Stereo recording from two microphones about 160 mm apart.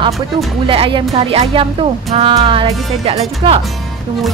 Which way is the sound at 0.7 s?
30° right (ahead or behind).